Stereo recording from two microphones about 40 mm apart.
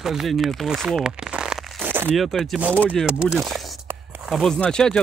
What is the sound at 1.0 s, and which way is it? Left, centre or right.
Crumpling, right.